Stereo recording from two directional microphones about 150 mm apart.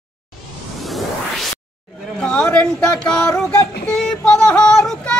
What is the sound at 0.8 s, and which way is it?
Whoosh, centre (ahead or behind).